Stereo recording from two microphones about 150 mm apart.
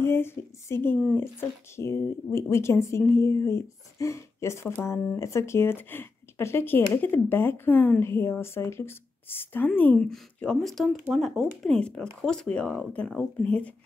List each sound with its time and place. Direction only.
0.0 s speech: 15° left (ahead or behind)